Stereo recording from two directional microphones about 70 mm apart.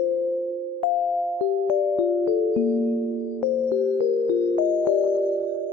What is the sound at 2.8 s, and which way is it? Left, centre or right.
Music, left.